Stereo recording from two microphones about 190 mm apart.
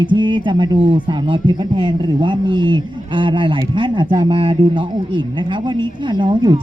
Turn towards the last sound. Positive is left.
turn(degrees=-25)  # may be behind; listen again after turning